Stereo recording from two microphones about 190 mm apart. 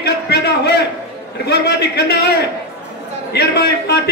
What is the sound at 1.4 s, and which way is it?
Speech, 60° left (ahead or behind).